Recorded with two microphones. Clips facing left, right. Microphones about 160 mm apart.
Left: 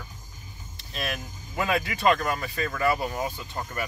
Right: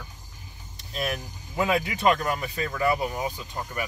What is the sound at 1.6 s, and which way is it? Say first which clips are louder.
Speech: right 2 dB; 20° right (ahead or behind).